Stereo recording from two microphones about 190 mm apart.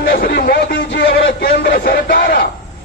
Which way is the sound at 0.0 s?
60° left (ahead or behind).